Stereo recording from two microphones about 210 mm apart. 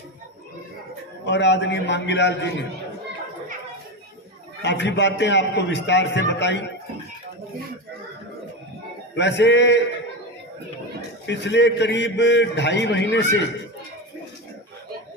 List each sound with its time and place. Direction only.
1.2 s a man's voice: 55° left (ahead or behind)
4.6 s a man's voice: 55° left (ahead or behind)
9.1 s a man's voice: 55° left (ahead or behind)
11.3 s a man's voice: 55° left (ahead or behind)